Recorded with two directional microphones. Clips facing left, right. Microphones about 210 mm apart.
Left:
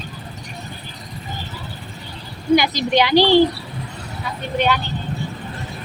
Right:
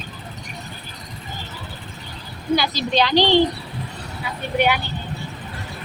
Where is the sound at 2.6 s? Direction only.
15° left (ahead or behind).